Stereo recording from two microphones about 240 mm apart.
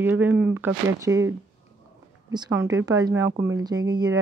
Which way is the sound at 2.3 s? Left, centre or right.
Centre.